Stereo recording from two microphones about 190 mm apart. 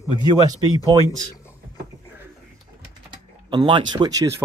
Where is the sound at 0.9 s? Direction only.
20° right (ahead or behind).